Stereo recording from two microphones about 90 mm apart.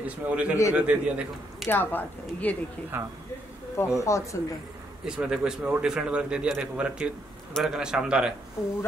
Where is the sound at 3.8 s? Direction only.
30° left (ahead or behind).